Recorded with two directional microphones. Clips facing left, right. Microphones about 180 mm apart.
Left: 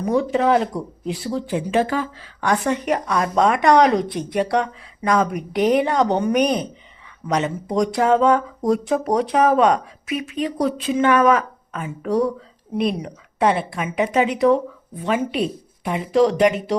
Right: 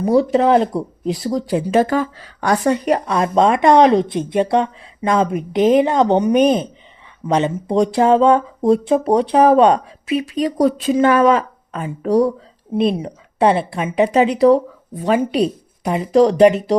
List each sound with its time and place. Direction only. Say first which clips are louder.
0.0 s speech: right 5 dB; 35° right (ahead or behind)